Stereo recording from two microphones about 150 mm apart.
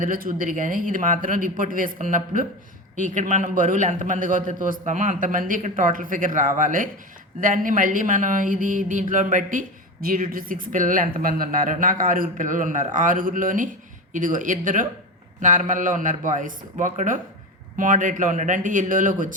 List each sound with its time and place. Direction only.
0.0 s speech: 65° right (ahead or behind)